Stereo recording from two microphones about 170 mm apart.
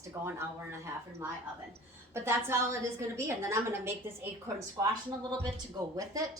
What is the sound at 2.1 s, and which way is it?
A woman's voice, 15° right (ahead or behind).